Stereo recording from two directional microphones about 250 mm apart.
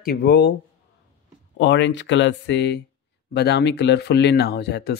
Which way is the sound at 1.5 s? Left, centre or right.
Left.